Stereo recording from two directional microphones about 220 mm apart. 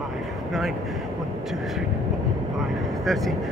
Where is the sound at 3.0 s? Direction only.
Centre (ahead or behind).